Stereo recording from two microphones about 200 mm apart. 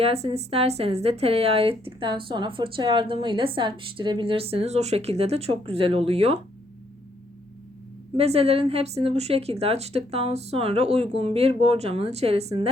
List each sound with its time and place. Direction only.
0.0 s a woman's voice: 30° right (ahead or behind)
8.1 s a woman's voice: 30° right (ahead or behind)